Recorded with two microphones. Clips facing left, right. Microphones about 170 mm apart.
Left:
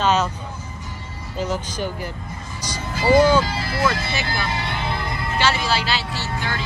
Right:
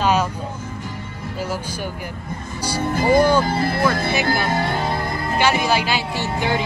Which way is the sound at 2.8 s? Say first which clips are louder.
Even; 55° right (ahead or behind).